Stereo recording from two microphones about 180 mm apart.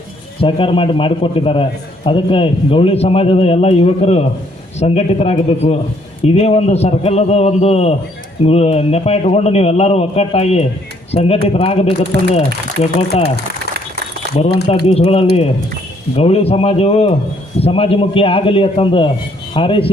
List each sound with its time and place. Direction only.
0.4 s a man's voice: 30° left (ahead or behind)
14.8 s a man's voice: 35° left (ahead or behind)